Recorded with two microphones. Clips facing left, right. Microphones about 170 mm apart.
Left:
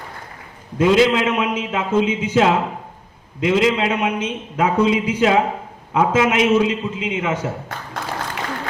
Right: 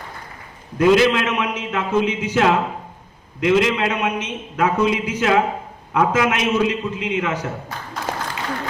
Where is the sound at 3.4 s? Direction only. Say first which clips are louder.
Even; 25° left (ahead or behind).